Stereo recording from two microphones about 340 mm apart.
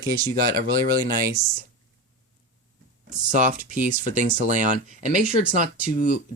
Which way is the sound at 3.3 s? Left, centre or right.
Right.